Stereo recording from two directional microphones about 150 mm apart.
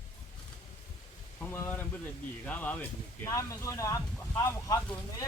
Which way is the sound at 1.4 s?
15° left (ahead or behind).